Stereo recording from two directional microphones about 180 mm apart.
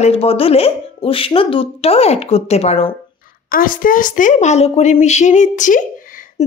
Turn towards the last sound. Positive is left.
turn(degrees=45)  # may be behind; listen again after turning